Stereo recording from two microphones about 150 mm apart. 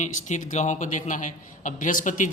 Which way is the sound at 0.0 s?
55° left (ahead or behind).